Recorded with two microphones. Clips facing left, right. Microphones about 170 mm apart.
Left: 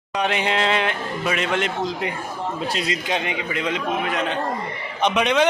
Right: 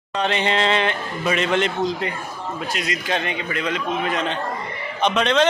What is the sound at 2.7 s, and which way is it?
Speech, 25° left (ahead or behind).